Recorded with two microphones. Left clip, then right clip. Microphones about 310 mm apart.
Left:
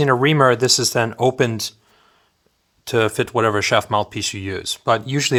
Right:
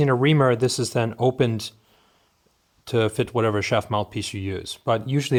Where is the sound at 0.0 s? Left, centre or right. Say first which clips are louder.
Left 5 dB; left.